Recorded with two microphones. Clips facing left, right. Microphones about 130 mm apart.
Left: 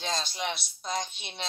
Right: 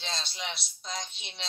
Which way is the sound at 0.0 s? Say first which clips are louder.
Left 6 dB; 45° left (ahead or behind).